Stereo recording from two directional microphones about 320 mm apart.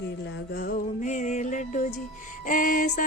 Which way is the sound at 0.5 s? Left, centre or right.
Left.